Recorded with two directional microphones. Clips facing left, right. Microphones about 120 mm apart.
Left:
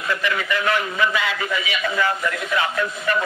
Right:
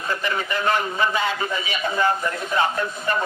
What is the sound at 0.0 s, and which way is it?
A man's voice, 35° right (ahead or behind).